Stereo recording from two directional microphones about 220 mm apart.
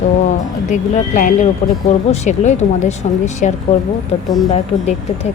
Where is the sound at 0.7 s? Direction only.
35° left (ahead or behind).